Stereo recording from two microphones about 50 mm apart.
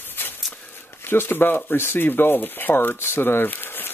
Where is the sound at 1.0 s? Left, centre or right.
Left.